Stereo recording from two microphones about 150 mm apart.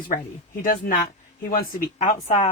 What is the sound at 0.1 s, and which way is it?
Speech, 70° left (ahead or behind).